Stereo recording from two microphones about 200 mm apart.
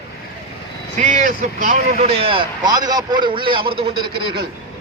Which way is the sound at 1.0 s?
40° right (ahead or behind).